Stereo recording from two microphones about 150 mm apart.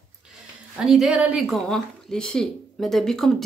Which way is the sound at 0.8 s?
5° right (ahead or behind).